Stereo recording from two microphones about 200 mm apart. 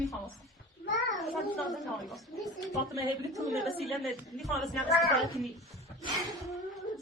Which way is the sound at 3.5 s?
Centre (ahead or behind).